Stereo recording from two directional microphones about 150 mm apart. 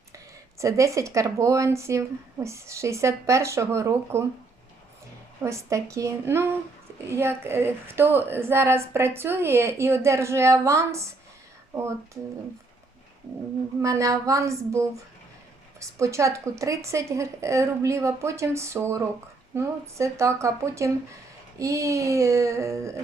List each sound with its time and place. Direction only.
0.6 s speech: 20° right (ahead or behind)
5.4 s a woman's voice: 20° right (ahead or behind)
13.8 s speech: 20° right (ahead or behind)